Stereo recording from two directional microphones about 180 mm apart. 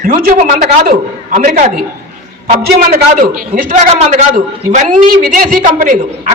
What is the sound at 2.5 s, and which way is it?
A man's voice, 55° right (ahead or behind).